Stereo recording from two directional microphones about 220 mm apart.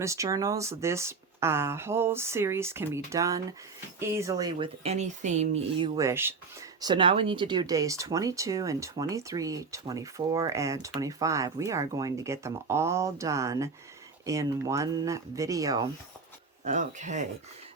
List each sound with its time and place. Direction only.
0.0 s speech: 15° right (ahead or behind)
4.5 s speech: 30° right (ahead or behind)
16.6 s speech: 35° right (ahead or behind)